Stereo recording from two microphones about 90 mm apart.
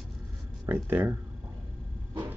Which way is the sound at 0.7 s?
25° right (ahead or behind).